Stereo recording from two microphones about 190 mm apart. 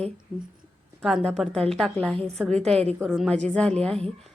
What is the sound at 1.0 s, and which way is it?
A woman's voice, centre (ahead or behind).